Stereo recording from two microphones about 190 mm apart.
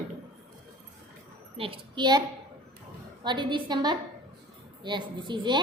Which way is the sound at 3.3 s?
25° right (ahead or behind).